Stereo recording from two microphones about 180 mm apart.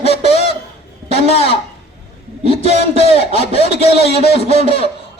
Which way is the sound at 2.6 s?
40° right (ahead or behind).